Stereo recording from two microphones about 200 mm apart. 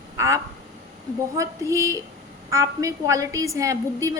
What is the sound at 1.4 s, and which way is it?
A woman's voice, 15° right (ahead or behind).